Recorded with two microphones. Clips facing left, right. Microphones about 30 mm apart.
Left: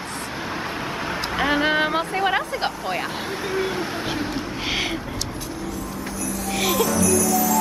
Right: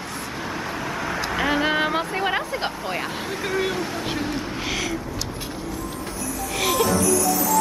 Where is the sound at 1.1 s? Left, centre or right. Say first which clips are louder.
Left 1 dB; centre.